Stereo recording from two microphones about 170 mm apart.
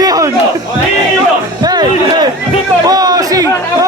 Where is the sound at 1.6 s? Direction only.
25° right (ahead or behind).